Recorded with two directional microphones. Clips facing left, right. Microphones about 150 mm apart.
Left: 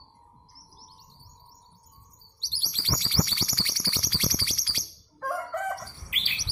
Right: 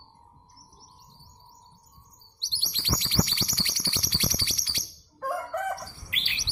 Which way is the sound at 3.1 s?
20° right (ahead or behind).